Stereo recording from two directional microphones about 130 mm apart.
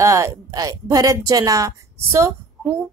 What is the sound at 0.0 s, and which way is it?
Speech, 20° right (ahead or behind).